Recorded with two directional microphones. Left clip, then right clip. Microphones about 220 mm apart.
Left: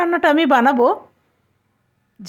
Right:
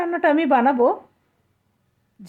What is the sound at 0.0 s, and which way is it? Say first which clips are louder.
Speech: left 4 dB; 20° left (ahead or behind).